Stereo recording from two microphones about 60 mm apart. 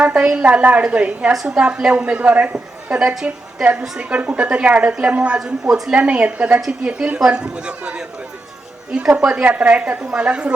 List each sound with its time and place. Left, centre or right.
0.0 s a woman's voice: centre
1.3 s a man's voice: centre
1.5 s a woman's voice: centre
5.4 s speech: centre
5.9 s a woman's voice: right